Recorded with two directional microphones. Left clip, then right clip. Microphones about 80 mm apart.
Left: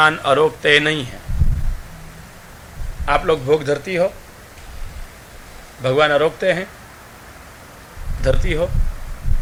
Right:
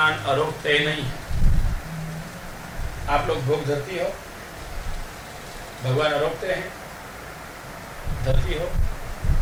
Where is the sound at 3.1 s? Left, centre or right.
Left.